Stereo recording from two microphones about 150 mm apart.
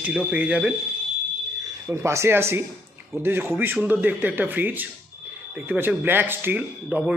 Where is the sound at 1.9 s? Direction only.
20° right (ahead or behind).